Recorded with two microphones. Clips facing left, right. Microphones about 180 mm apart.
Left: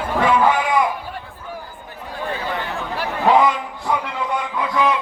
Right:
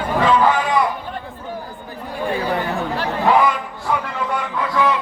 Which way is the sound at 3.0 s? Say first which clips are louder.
Left 1 dB; 20° left (ahead or behind).